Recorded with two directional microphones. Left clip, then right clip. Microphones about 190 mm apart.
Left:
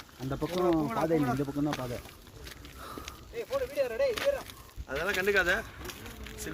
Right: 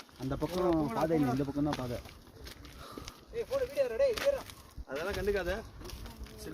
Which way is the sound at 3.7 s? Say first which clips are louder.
Even; 65° right (ahead or behind).